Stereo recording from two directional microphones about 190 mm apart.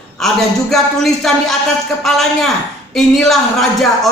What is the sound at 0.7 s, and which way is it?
Speech, centre (ahead or behind).